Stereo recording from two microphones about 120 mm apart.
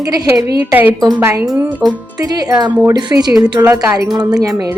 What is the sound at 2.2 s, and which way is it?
A woman's voice, 35° right (ahead or behind).